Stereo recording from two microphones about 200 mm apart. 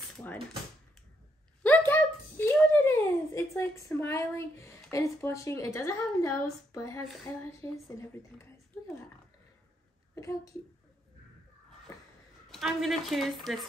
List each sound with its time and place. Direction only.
0.1 s typewriter: 5° left (ahead or behind)
1.6 s a sound: 10° left (ahead or behind)
4.9 s a woman's voice: 15° left (ahead or behind)
10.1 s a woman's voice: 15° left (ahead or behind)
12.4 s a woman's voice: centre (ahead or behind)